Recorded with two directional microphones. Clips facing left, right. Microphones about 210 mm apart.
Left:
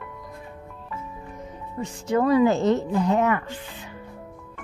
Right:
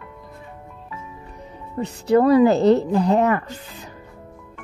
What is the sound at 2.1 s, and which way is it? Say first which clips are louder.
Speech: right 5 dB; 35° right (ahead or behind).